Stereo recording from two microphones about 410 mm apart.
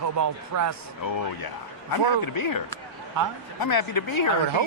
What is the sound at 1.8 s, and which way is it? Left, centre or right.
A woman's voice, left.